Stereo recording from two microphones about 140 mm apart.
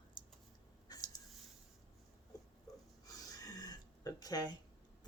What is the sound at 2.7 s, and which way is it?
Rub, 25° left (ahead or behind).